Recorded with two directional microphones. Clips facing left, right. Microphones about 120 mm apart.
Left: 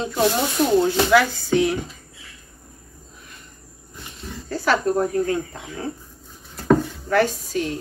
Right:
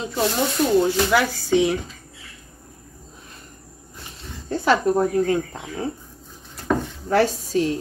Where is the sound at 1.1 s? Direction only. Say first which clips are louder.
Left 2 dB; 15° right (ahead or behind).